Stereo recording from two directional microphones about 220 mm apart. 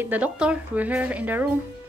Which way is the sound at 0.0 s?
5° right (ahead or behind).